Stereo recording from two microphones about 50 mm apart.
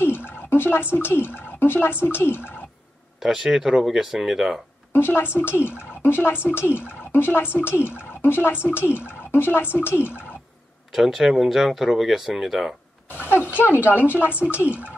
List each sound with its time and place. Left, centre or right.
0.0 s drip: left
0.9 s speech: left
3.2 s speech: centre
4.9 s speech: left
10.9 s speech: centre
13.7 s speech: right